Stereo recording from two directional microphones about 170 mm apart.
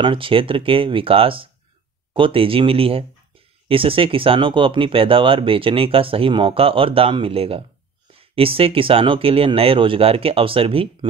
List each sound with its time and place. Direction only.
0.0 s speech: 30° right (ahead or behind)